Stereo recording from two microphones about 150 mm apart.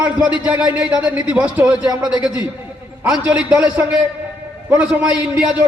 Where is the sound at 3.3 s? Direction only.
10° right (ahead or behind).